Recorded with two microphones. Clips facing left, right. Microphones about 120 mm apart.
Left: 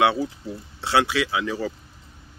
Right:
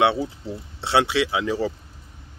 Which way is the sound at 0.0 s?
25° right (ahead or behind).